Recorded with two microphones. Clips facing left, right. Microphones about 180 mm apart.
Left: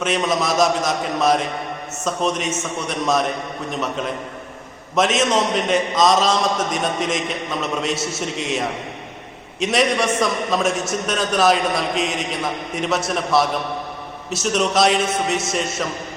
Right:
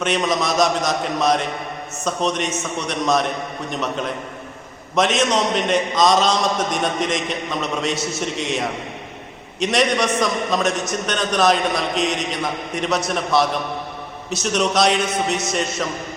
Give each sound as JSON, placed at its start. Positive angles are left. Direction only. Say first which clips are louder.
{"t": 0.0, "sound": "a man's voice", "louder": "even", "side_deg": 0}